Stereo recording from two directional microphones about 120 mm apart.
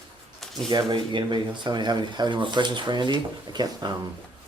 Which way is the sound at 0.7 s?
40° right (ahead or behind).